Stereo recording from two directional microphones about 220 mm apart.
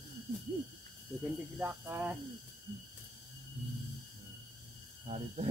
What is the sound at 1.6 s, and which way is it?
Speech, 5° right (ahead or behind).